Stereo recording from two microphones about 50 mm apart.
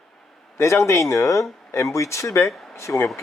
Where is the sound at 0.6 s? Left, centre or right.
Left.